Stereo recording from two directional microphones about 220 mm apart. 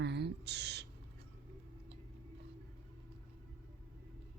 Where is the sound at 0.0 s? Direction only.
50° right (ahead or behind).